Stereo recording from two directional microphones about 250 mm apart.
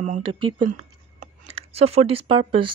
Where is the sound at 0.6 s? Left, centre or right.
Right.